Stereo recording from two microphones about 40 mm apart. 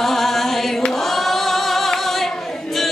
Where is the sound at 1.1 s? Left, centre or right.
Centre.